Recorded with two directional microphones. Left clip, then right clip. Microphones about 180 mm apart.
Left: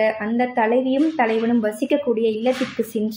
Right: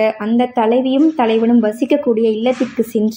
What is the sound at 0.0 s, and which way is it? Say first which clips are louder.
A woman's voice: right 4 dB; 30° right (ahead or behind).